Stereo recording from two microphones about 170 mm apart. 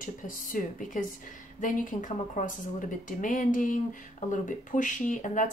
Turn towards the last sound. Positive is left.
turn(degrees=50)  # may be behind; listen again after turning